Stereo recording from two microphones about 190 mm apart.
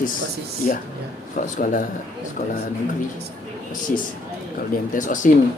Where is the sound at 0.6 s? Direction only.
40° left (ahead or behind).